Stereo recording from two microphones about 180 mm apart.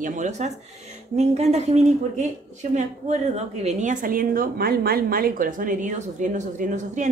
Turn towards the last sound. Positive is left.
turn(degrees=-45)  # may be behind; listen again after turning